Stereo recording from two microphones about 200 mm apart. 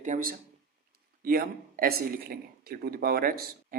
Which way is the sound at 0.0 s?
40° right (ahead or behind).